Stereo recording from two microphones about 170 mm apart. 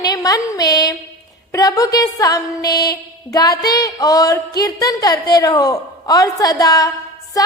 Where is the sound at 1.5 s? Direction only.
20° left (ahead or behind).